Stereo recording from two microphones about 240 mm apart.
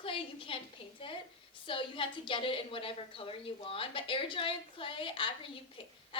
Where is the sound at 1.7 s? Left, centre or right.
Left.